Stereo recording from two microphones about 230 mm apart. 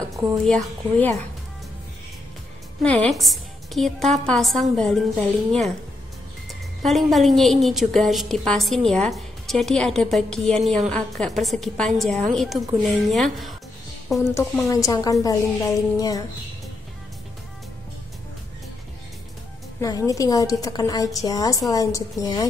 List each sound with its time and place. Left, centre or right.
0.5 s a woman's voice: centre
2.8 s a woman's voice: centre
6.8 s a woman's voice: centre
19.8 s a woman's voice: centre